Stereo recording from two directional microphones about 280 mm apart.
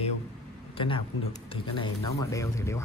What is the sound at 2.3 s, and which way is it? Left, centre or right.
Speech, centre.